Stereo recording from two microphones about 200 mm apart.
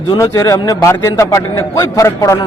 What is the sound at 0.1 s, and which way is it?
A man's voice, 15° left (ahead or behind).